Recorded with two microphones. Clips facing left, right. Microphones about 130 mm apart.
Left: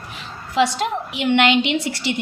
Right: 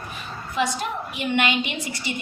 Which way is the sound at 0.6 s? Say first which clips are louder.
Left 6 dB; 85° left.